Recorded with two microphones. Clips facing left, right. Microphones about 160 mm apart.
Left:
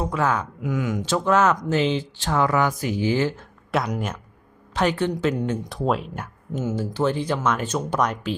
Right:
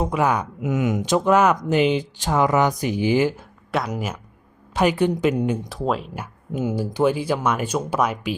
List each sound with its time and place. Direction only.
0.0 s speech: 15° right (ahead or behind)
3.7 s speech: centre (ahead or behind)
5.6 s speech: centre (ahead or behind)
6.5 s speech: 10° right (ahead or behind)